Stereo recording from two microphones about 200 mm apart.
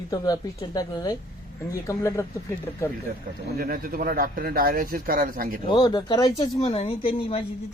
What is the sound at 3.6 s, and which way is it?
Speech, 45° right (ahead or behind).